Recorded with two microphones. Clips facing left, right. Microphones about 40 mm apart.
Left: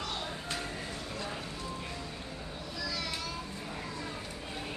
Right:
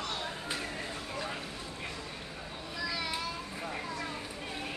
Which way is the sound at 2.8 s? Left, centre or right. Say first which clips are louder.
Right 2 dB; centre.